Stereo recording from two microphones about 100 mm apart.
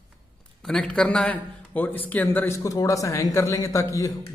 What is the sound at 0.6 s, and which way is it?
A man's voice, 5° left (ahead or behind).